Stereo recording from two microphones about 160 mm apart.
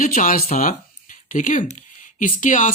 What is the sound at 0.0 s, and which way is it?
Speech, 55° left (ahead or behind).